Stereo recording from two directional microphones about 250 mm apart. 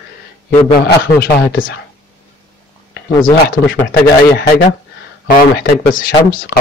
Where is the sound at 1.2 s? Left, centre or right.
Left.